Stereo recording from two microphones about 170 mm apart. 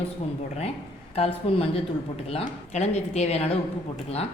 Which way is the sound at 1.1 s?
35° left (ahead or behind).